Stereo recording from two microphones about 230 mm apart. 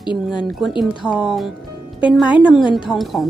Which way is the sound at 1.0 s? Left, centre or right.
Centre.